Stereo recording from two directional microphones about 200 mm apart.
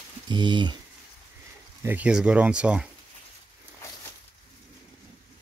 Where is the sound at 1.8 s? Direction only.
10° right (ahead or behind).